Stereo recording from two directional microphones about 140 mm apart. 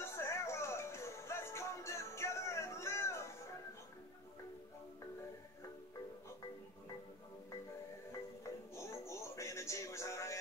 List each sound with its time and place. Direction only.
0.0 s music: 20° left (ahead or behind)
8.7 s music: 20° left (ahead or behind)